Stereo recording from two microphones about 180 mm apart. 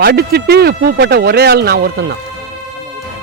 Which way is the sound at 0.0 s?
60° right (ahead or behind).